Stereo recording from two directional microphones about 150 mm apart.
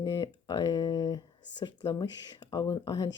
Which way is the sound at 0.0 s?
25° left (ahead or behind).